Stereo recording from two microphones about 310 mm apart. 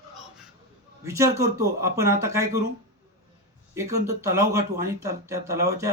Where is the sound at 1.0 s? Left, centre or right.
Centre.